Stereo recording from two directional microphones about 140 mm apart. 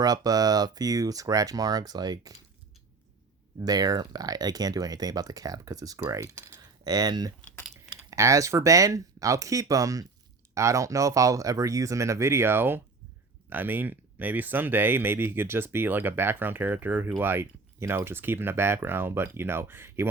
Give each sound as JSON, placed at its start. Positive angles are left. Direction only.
{"t": 0.0, "sound": "speech", "side_deg": -30}
{"t": 3.6, "sound": "speech", "side_deg": -25}